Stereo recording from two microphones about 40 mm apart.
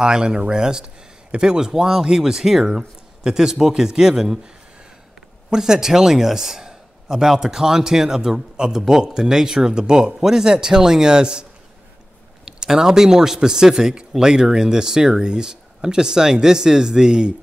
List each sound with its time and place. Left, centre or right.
0.0 s speech: right
5.5 s speech: centre
12.4 s speech: centre